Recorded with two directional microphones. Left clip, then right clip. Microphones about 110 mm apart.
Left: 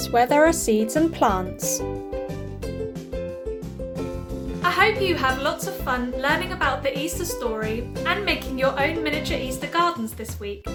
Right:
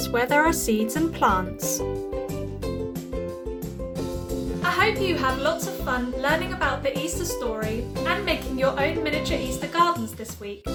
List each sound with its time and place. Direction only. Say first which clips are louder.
0.0 s speech: left 3 dB; 30° left (ahead or behind)
1.6 s speech: even; centre (ahead or behind)
4.7 s a woman's voice: left 2 dB; 15° left (ahead or behind)